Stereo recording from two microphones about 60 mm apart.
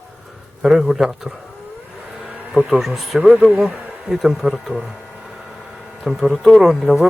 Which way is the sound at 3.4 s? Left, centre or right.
Centre.